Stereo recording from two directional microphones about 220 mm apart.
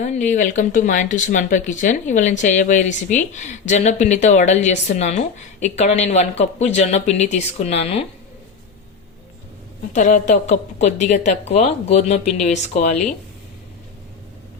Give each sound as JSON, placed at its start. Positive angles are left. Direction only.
{"t": 0.0, "sound": "speech", "side_deg": 35}
{"t": 9.9, "sound": "speech", "side_deg": 35}